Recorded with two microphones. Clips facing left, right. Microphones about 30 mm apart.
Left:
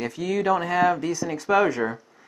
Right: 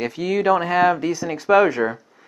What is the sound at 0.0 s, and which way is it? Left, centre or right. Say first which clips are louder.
Speech: right 4 dB; right.